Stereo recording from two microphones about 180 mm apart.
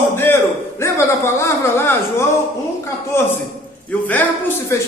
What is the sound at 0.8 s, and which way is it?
A man's voice, 15° left (ahead or behind).